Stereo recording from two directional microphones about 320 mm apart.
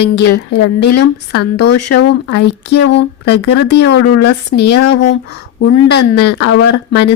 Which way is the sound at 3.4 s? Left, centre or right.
Left.